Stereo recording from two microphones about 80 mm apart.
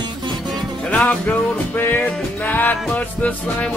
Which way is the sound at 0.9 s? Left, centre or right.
Centre.